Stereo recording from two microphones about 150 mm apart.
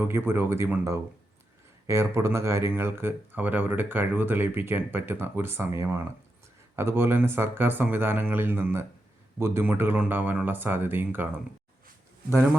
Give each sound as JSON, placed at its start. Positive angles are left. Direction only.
{"t": 0.0, "sound": "speech", "side_deg": -15}